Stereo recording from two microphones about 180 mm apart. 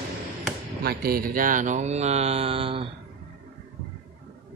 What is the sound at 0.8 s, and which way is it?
Speech, 55° right (ahead or behind).